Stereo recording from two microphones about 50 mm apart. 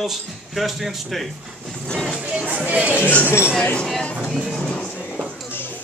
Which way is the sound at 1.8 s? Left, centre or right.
Centre.